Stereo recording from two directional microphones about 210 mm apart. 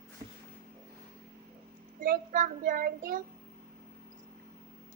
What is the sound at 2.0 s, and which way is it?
Child singing, 40° right (ahead or behind).